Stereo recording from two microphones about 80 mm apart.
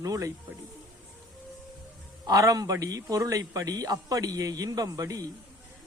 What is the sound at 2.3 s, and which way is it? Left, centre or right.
A man's voice, right.